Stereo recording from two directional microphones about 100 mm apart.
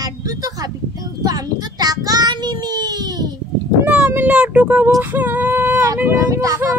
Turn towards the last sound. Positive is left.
turn(degrees=-30)  # may be behind; listen again after turning